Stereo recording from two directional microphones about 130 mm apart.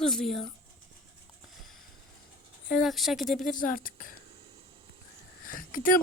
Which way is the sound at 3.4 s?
90° left.